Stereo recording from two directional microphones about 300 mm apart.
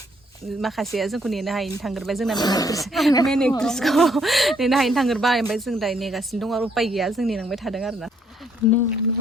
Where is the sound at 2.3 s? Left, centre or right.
Centre.